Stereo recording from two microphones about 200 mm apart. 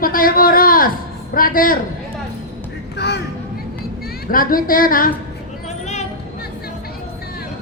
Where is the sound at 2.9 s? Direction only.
55° left (ahead or behind).